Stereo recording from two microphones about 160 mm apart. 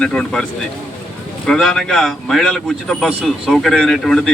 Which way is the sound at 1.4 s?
5° left (ahead or behind).